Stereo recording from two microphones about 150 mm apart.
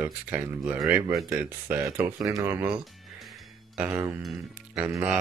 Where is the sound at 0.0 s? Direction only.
10° right (ahead or behind).